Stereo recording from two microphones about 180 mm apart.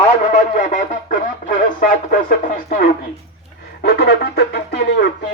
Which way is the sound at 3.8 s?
65° left (ahead or behind).